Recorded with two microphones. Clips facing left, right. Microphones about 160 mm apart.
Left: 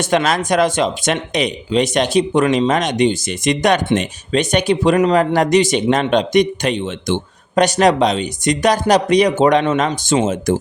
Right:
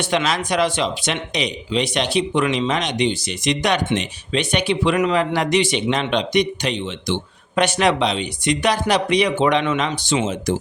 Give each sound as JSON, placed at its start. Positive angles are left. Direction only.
{"t": 0.0, "sound": "speech", "side_deg": 45}